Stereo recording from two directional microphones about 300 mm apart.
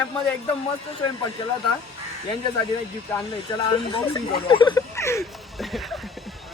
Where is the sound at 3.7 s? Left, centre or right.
Centre.